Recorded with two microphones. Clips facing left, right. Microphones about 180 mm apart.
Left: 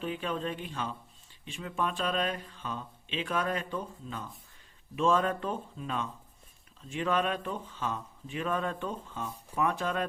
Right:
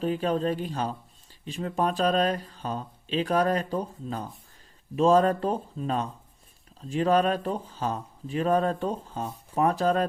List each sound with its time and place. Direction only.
0.0 s speech: 40° right (ahead or behind)